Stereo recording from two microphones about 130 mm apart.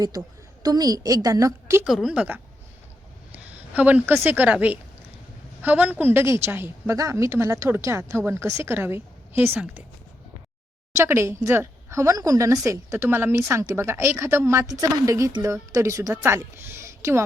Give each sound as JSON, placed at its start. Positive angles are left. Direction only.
{"t": 0.6, "sound": "a woman's voice", "side_deg": -30}
{"t": 1.8, "sound": "a woman's voice", "side_deg": -5}
{"t": 10.9, "sound": "a woman's voice", "side_deg": -20}